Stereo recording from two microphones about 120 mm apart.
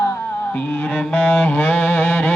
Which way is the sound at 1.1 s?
10° left (ahead or behind).